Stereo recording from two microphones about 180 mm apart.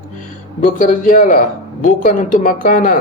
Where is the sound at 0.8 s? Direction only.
50° left (ahead or behind).